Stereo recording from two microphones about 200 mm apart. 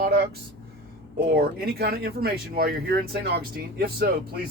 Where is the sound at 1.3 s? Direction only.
50° right (ahead or behind).